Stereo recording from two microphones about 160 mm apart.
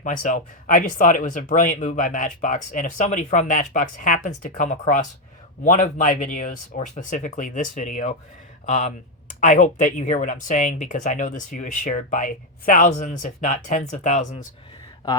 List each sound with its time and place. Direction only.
0.0 s speech: 55° left (ahead or behind)